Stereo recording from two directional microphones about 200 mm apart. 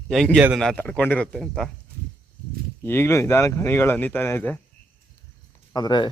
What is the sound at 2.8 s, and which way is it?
Speech, 15° left (ahead or behind).